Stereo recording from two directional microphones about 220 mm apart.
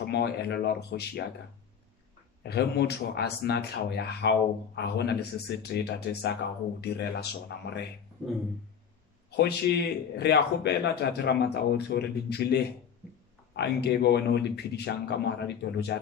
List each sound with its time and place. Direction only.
0.0 s a man's voice: 45° left (ahead or behind)
2.4 s a man's voice: 50° left (ahead or behind)
9.3 s a man's voice: 50° left (ahead or behind)